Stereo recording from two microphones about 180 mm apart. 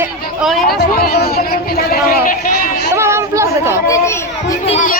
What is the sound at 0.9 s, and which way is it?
Speech, 60° left (ahead or behind).